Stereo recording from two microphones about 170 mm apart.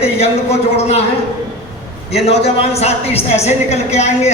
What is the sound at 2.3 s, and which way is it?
A woman's voice, 35° left (ahead or behind).